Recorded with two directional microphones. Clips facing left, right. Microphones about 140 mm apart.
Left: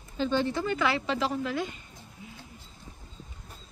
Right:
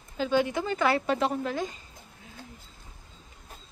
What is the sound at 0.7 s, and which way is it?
Speech, 50° right (ahead or behind).